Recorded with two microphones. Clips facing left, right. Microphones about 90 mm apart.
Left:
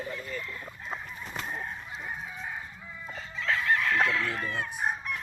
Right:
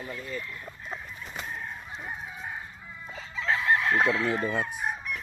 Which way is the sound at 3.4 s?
25° right (ahead or behind).